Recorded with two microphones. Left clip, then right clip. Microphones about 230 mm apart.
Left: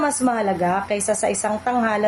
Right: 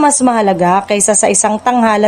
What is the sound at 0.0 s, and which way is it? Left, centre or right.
A woman's voice, right.